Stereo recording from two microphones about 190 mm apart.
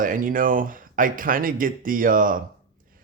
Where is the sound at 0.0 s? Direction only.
45° right (ahead or behind).